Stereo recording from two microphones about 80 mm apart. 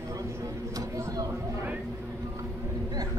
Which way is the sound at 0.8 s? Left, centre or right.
Right.